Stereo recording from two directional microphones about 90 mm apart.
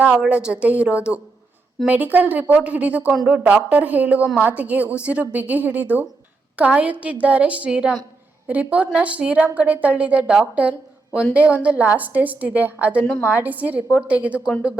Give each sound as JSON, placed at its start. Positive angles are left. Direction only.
{"t": 0.0, "sound": "a woman's voice", "side_deg": -15}